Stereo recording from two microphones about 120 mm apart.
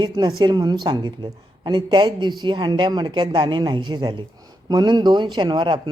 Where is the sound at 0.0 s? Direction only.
35° right (ahead or behind).